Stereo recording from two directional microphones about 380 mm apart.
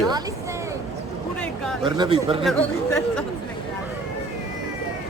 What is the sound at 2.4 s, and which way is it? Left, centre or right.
Mantra, centre.